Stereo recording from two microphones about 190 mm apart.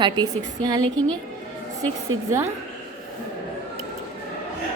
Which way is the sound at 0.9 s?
5° left (ahead or behind).